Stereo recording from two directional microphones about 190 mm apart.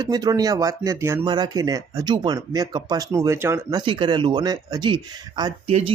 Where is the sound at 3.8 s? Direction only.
25° right (ahead or behind).